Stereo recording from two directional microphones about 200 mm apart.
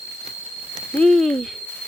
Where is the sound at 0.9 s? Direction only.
5° left (ahead or behind).